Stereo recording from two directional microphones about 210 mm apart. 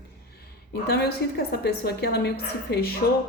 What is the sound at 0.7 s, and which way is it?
A woman's voice, 50° left (ahead or behind).